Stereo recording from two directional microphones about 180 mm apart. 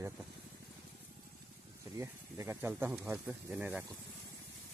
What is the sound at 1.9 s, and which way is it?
Speech, 15° right (ahead or behind).